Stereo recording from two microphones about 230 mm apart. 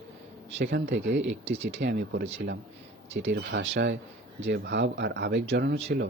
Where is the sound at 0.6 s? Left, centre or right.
Right.